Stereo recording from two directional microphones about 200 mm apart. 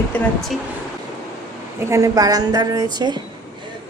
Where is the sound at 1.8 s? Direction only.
15° right (ahead or behind).